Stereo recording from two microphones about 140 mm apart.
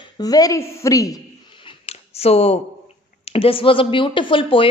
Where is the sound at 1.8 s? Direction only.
45° left (ahead or behind).